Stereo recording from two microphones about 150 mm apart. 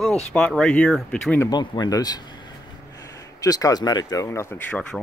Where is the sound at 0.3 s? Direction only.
5° left (ahead or behind).